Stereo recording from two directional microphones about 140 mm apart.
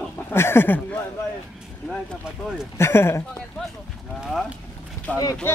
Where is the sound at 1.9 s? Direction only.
Centre (ahead or behind).